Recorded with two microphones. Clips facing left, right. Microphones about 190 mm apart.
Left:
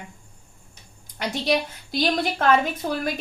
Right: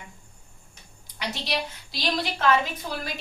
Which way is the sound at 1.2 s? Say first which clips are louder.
Left 7 dB; 50° left (ahead or behind).